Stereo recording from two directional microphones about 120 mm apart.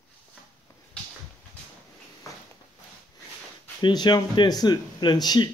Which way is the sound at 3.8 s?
35° left (ahead or behind).